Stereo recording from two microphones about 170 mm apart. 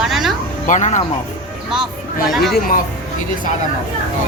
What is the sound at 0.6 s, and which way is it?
Speech, 45° left (ahead or behind).